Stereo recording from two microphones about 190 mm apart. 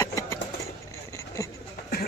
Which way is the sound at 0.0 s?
15° left (ahead or behind).